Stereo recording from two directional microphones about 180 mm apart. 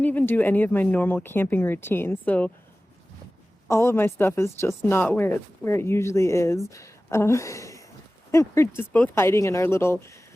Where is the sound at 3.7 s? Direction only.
15° left (ahead or behind).